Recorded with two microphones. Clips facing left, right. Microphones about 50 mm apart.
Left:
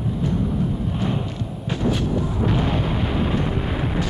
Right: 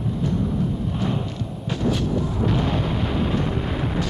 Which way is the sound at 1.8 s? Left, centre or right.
Centre.